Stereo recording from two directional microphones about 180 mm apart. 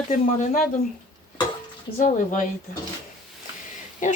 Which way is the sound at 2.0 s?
45° left (ahead or behind).